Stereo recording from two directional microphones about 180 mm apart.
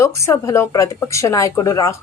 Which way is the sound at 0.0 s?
15° left (ahead or behind).